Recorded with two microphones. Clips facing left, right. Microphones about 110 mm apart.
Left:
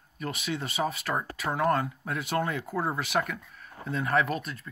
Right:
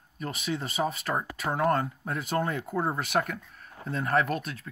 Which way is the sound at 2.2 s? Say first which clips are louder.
Even; 35° right (ahead or behind).